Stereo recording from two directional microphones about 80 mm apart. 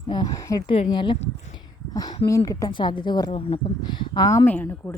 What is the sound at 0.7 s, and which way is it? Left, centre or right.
Speech, left.